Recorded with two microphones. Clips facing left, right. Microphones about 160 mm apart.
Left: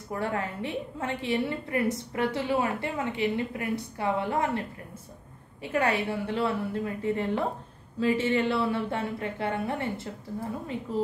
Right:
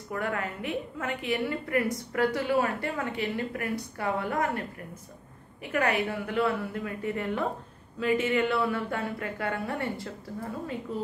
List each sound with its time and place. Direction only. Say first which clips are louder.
0.1 s a woman's voice: left 1 dB; 30° left (ahead or behind)